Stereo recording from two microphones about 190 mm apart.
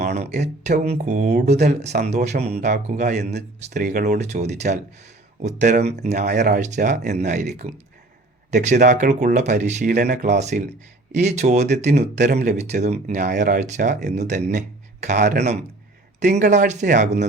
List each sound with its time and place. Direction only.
0.2 s speech: 35° right (ahead or behind)
15.2 s a man's voice: 60° right (ahead or behind)
16.3 s speech: 40° right (ahead or behind)